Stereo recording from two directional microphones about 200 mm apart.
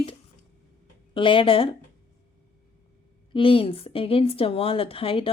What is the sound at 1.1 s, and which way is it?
Speech, 25° left (ahead or behind).